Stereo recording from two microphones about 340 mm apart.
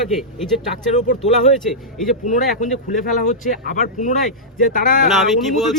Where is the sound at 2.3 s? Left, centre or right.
Left.